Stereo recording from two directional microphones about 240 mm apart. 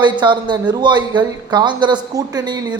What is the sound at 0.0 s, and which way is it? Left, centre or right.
Speech, centre.